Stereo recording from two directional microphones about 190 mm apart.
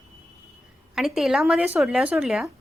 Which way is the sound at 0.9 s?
Centre (ahead or behind).